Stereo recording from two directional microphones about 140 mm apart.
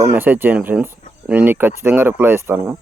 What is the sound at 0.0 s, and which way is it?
Speech, 15° right (ahead or behind).